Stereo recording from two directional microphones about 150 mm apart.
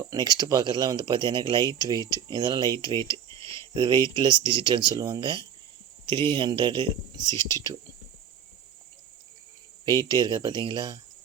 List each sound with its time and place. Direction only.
0.1 s speech: 25° right (ahead or behind)
9.8 s speech: 25° right (ahead or behind)